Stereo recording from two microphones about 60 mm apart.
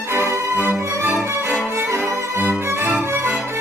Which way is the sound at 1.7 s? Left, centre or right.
Right.